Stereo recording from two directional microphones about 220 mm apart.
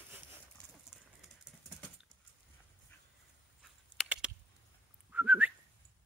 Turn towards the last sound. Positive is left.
turn(degrees=-5)  # may be behind; listen again after turning